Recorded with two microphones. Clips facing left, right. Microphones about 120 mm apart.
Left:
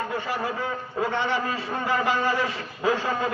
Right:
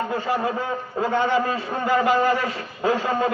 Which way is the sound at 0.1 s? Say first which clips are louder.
Right 5 dB; 25° right (ahead or behind).